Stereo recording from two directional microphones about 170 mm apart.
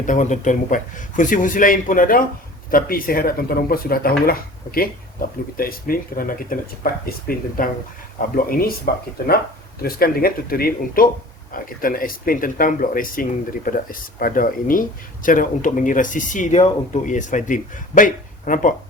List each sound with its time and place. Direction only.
0.0 s speech: 50° left (ahead or behind)